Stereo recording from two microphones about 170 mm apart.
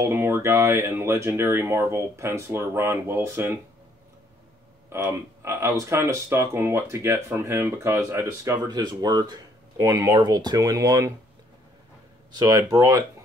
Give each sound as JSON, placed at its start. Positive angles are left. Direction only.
{"t": 0.0, "sound": "speech", "side_deg": -15}
{"t": 4.8, "sound": "speech", "side_deg": -15}
{"t": 12.4, "sound": "speech", "side_deg": -20}